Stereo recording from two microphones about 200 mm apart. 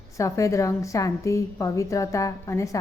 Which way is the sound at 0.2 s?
15° left (ahead or behind).